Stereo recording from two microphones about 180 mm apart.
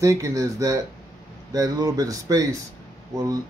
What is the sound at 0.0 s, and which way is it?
Speech, 20° right (ahead or behind).